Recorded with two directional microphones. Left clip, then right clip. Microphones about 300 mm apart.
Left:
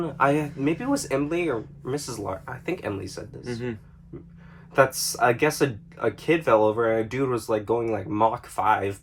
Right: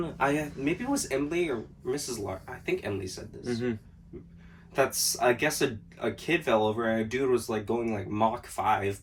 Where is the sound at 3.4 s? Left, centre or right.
Centre.